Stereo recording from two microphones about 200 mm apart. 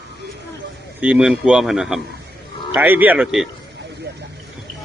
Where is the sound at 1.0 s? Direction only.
5° right (ahead or behind).